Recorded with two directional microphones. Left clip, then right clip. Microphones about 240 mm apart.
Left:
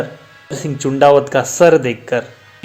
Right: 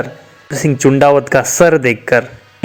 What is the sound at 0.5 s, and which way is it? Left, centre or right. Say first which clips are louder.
Speech: right 8 dB; right.